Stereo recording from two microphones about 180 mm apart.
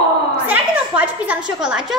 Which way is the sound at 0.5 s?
10° right (ahead or behind).